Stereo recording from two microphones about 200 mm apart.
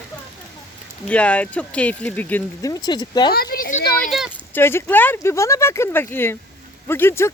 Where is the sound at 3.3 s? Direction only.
50° left (ahead or behind).